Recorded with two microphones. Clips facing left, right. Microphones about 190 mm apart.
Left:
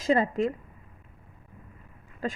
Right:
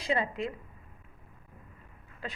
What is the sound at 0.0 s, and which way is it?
Speech, 45° left (ahead or behind).